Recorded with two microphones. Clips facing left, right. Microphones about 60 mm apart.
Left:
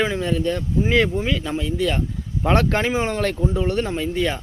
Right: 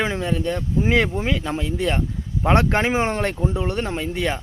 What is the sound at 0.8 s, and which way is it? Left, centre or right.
A man's voice, right.